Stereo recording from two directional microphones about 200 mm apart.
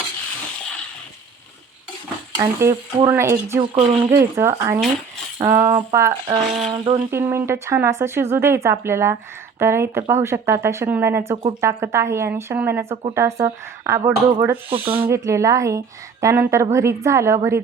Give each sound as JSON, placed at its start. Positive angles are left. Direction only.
{"t": 2.4, "sound": "speech", "side_deg": -15}
{"t": 3.8, "sound": "speech", "side_deg": -30}
{"t": 4.1, "sound": "speech", "side_deg": -15}
{"t": 6.7, "sound": "speech", "side_deg": -30}
{"t": 7.1, "sound": "speech", "side_deg": -10}